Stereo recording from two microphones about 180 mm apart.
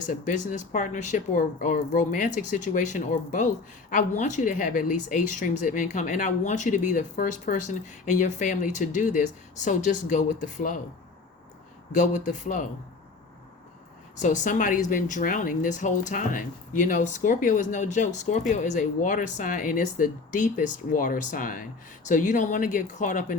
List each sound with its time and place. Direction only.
0.0 s speech: 45° left (ahead or behind)
11.9 s speech: 45° left (ahead or behind)
14.2 s speech: 45° left (ahead or behind)